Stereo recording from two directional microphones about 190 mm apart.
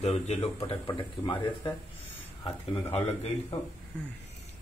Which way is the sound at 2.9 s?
30° left (ahead or behind).